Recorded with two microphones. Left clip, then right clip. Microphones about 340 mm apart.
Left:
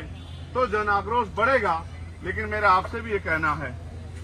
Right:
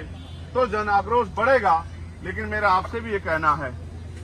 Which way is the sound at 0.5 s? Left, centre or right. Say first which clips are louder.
Right 2 dB; centre.